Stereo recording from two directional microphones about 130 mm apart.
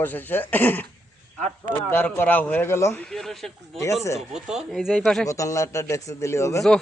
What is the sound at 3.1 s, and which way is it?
Speech, centre (ahead or behind).